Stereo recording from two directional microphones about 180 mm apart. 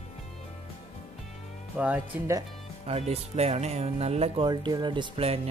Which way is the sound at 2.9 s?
35° right (ahead or behind).